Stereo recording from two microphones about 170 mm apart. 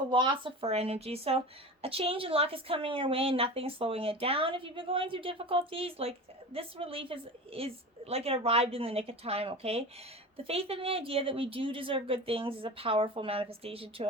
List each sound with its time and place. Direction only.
0.1 s a woman's voice: 30° right (ahead or behind)